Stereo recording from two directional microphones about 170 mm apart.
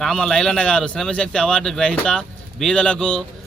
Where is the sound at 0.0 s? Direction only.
5° left (ahead or behind).